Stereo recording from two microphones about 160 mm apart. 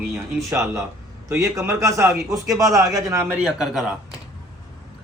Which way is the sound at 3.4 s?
5° right (ahead or behind).